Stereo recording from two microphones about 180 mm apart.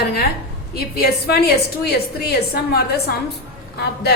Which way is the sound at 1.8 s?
60° left (ahead or behind).